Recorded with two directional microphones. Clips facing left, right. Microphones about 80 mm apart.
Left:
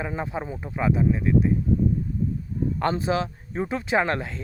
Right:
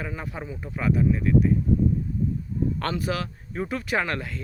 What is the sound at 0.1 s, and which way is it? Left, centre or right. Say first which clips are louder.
Speech: left 5 dB; left.